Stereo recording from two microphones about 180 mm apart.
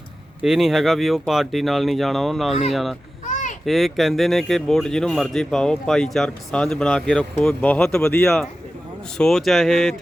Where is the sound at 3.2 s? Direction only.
40° left (ahead or behind).